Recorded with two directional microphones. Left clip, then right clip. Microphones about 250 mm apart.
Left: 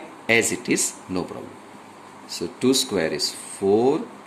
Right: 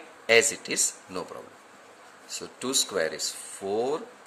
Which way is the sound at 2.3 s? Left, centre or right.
Centre.